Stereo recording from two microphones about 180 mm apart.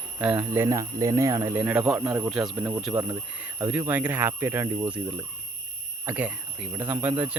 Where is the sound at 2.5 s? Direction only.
20° right (ahead or behind).